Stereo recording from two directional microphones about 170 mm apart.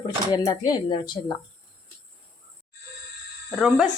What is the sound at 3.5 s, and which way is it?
Speech, centre (ahead or behind).